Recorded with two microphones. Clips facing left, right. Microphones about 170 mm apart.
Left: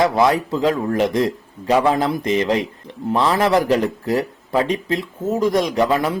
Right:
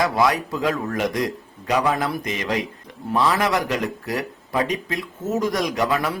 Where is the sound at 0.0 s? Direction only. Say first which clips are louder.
Left 4 dB; 25° left (ahead or behind).